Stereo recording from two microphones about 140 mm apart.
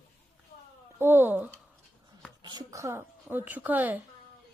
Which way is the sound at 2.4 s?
35° right (ahead or behind).